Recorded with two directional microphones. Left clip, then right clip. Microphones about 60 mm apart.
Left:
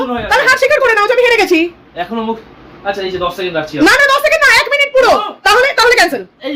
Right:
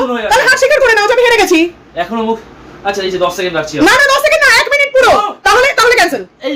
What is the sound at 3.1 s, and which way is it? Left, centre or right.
Speech, right.